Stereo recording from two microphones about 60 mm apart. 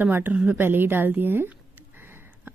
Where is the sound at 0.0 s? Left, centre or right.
Right.